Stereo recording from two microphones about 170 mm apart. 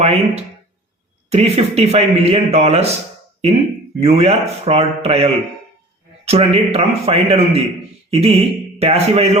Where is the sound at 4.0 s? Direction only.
35° right (ahead or behind).